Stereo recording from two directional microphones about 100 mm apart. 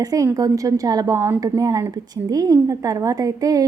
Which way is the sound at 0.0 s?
40° right (ahead or behind).